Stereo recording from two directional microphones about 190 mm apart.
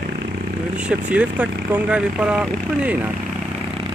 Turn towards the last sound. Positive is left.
turn(degrees=-5)  # may be behind; listen again after turning